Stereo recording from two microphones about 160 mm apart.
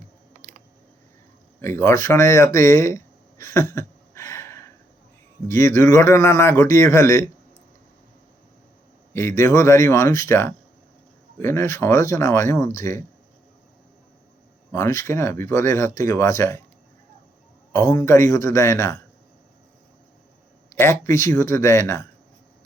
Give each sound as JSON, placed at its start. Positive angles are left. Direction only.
{"t": 1.6, "sound": "speech", "side_deg": 15}
{"t": 9.1, "sound": "speech", "side_deg": 15}
{"t": 14.7, "sound": "speech", "side_deg": 15}
{"t": 17.7, "sound": "speech", "side_deg": 20}
{"t": 20.7, "sound": "speech", "side_deg": 15}